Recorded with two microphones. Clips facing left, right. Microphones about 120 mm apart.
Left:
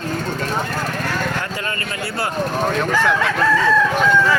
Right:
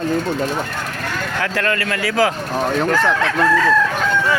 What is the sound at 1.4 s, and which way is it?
Speech, 70° right (ahead or behind).